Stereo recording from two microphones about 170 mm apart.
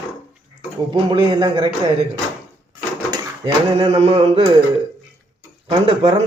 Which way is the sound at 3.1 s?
30° right (ahead or behind).